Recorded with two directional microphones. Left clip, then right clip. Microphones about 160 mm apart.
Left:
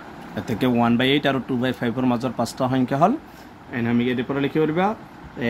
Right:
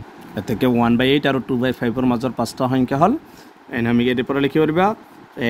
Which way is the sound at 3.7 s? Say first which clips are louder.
Right 4 dB; 70° right (ahead or behind).